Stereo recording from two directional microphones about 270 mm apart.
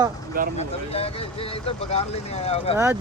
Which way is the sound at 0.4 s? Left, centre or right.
Right.